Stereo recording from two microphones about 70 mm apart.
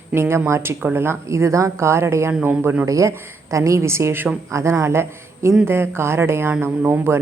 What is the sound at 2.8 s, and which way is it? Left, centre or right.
A man's voice, right.